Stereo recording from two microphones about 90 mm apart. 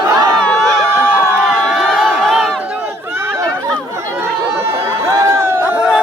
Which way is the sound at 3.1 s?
25° right (ahead or behind).